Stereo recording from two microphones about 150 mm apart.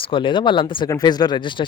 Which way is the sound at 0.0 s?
35° left (ahead or behind).